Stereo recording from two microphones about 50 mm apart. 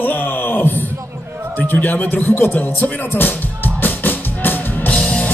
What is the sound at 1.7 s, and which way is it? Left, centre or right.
A man's voice, left.